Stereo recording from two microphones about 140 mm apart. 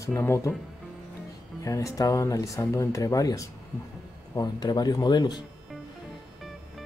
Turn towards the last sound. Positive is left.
turn(degrees=30)  # may be behind; listen again after turning